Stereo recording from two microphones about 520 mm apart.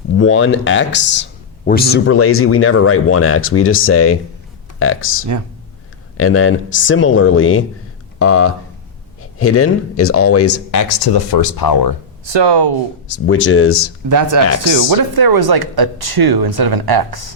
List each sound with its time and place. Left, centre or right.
0.2 s speech: left
12.2 s speech: right
13.2 s speech: left
14.1 s speech: right